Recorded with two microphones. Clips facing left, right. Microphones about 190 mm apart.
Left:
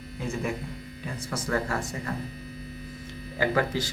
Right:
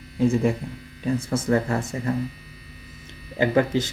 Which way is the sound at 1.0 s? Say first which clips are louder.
Right 10 dB; 25° right (ahead or behind).